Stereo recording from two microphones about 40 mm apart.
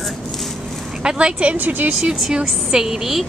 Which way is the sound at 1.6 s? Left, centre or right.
Right.